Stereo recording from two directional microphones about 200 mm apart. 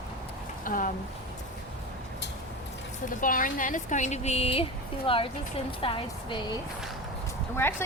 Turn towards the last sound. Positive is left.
turn(degrees=10)  # may be behind; listen again after turning